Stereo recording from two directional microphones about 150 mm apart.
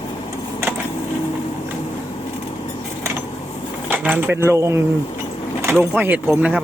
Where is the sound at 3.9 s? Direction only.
10° right (ahead or behind).